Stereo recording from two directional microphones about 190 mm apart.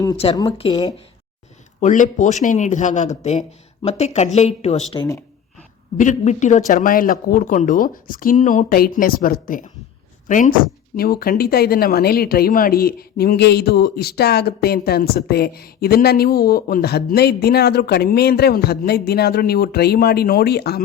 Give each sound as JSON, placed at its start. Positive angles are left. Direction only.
{"t": 0.3, "sound": "speech", "side_deg": 20}
{"t": 1.8, "sound": "speech", "side_deg": 40}
{"t": 6.0, "sound": "speech", "side_deg": 40}